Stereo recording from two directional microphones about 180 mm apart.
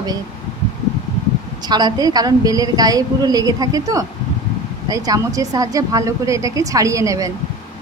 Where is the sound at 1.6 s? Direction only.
25° right (ahead or behind).